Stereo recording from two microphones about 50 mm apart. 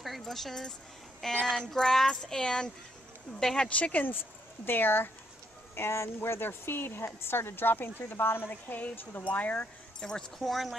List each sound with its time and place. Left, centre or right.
0.2 s speech: centre
3.7 s speech: left
4.6 s speech: left
5.8 s speech: left
9.9 s speech: centre
10.4 s speech: centre